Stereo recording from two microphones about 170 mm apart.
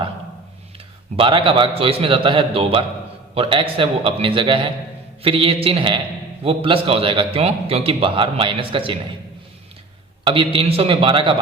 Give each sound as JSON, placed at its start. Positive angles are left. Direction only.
{"t": 1.1, "sound": "a man's voice", "side_deg": -30}
{"t": 10.2, "sound": "a man's voice", "side_deg": -30}